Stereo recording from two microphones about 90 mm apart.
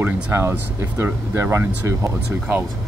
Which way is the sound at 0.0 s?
30° right (ahead or behind).